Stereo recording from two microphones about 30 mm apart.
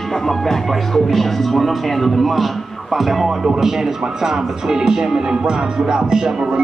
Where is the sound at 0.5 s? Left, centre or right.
Centre.